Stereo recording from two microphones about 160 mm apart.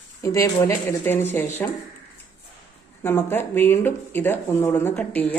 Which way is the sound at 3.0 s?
15° left (ahead or behind).